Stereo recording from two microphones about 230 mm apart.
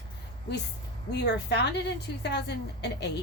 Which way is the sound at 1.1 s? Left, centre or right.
Left.